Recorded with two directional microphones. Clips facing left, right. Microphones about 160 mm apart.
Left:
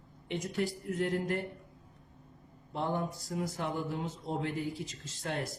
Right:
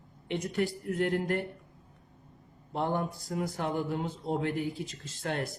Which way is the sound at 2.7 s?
55° right (ahead or behind).